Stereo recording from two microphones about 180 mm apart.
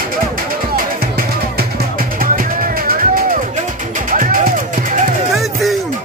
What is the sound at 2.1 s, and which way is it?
Music, 50° right (ahead or behind).